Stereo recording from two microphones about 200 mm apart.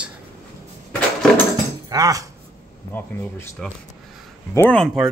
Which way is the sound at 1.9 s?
15° right (ahead or behind).